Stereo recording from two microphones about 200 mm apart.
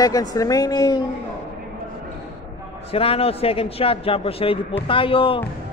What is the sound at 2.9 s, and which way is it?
A man's voice, 30° left (ahead or behind).